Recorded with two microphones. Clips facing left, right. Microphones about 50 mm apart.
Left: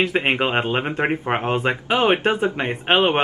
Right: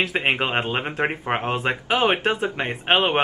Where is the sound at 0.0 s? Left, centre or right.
Centre.